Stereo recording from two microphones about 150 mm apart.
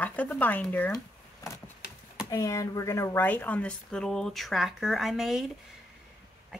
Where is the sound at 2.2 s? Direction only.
20° left (ahead or behind); by 5.4 s centre (ahead or behind).